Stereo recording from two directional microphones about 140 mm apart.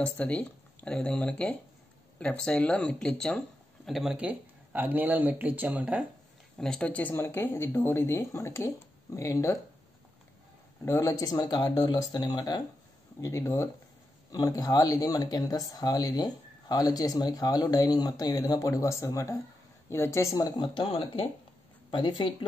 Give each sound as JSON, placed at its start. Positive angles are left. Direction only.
{"t": 0.0, "sound": "speech", "side_deg": 10}
{"t": 6.6, "sound": "speech", "side_deg": 5}
{"t": 10.9, "sound": "speech", "side_deg": 20}